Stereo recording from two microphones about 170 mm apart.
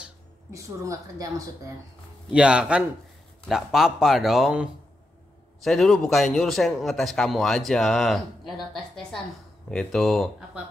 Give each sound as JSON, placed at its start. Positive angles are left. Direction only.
{"t": 0.5, "sound": "a woman's voice", "side_deg": -20}
{"t": 2.3, "sound": "a man's voice", "side_deg": -5}